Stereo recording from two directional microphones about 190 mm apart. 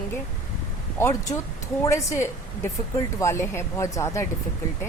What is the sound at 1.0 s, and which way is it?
A woman's voice, 15° left (ahead or behind).